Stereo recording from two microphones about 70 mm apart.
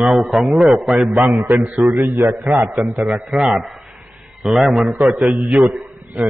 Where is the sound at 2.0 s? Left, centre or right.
Right.